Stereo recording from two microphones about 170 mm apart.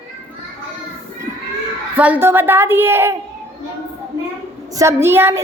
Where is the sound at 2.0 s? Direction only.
10° right (ahead or behind).